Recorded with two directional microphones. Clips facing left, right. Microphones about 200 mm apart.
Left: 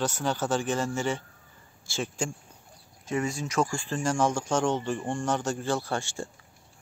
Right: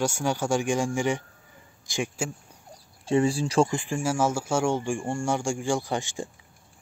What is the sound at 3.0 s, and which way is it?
Speech, 30° right (ahead or behind).